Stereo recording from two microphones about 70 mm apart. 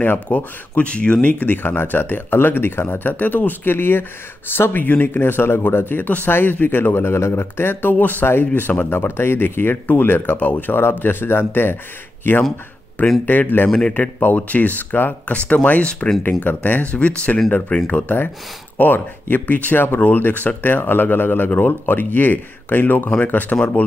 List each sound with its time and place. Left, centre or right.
0.0 s speech: left
13.2 s speech: left
13.7 s speech: centre
13.9 s speech: left